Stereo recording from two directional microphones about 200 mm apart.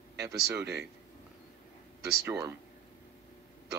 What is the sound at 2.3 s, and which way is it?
Speech, 15° right (ahead or behind).